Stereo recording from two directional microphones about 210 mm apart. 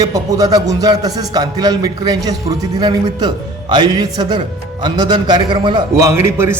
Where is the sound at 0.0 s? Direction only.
15° right (ahead or behind).